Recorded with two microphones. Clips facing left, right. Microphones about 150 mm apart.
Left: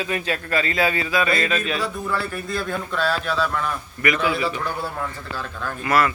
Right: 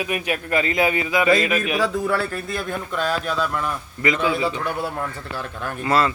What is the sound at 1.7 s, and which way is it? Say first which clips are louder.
Speech: right 5 dB; 90° right.